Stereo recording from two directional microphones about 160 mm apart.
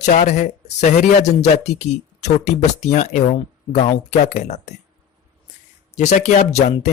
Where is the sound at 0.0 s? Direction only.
50° left (ahead or behind).